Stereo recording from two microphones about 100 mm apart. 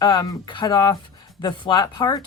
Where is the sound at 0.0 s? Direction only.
45° left (ahead or behind).